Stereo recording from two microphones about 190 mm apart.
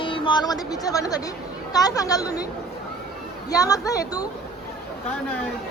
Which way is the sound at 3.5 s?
20° left (ahead or behind).